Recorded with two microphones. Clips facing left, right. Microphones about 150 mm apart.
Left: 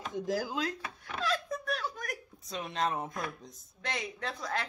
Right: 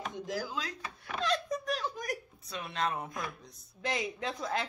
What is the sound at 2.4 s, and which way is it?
Speech, 25° left (ahead or behind).